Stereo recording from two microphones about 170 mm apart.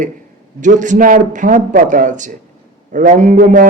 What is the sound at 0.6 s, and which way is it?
A man's voice, 50° right (ahead or behind).